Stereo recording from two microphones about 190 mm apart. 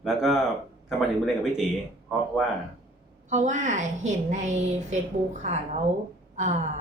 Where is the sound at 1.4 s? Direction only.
5° right (ahead or behind).